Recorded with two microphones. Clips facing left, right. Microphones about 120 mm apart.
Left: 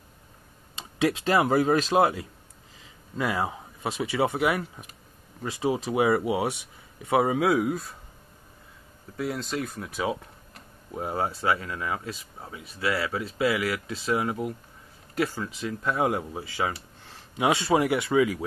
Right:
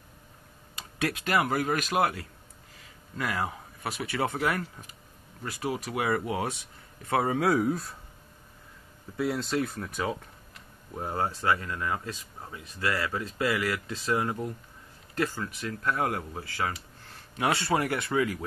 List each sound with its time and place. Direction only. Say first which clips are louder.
0.7 s speech: left 6 dB; 20° left (ahead or behind); by 7.9 s 5° left (ahead or behind)
9.1 s speech: right 2 dB; centre (ahead or behind)